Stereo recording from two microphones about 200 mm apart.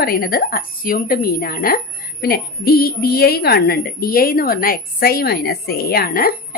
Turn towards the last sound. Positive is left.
turn(degrees=45)  # may be behind; listen again after turning